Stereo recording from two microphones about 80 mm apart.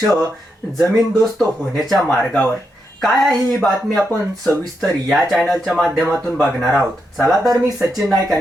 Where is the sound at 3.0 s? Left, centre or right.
Centre.